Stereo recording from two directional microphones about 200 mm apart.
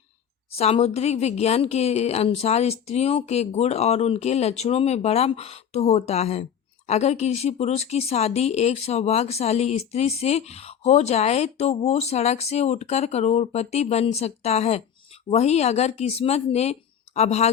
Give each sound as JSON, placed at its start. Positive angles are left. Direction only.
{"t": 0.5, "sound": "speech", "side_deg": 30}